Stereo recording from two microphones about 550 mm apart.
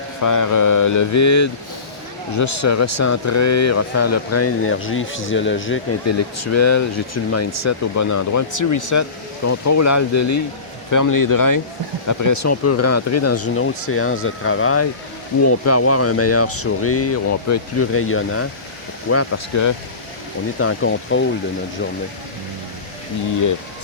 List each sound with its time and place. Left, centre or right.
0.2 s speech: left